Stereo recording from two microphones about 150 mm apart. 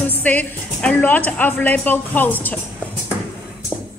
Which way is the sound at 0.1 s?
10° left (ahead or behind).